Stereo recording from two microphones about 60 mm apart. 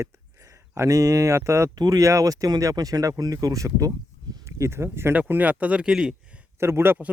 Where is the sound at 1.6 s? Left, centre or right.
Right.